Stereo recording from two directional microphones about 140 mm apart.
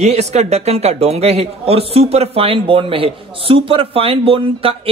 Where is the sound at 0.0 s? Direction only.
50° right (ahead or behind).